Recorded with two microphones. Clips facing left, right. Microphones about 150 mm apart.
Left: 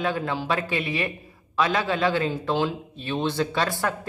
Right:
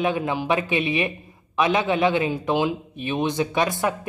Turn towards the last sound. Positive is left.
turn(degrees=-20)  # may be behind; listen again after turning